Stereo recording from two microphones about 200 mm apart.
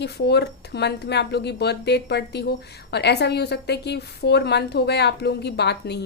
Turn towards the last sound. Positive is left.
turn(degrees=55)  # may be behind; listen again after turning